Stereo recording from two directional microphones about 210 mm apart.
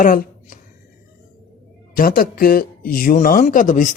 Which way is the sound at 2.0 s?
45° left (ahead or behind).